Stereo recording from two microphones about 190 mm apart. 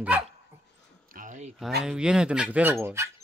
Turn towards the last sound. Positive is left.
turn(degrees=-15)  # may be behind; listen again after turning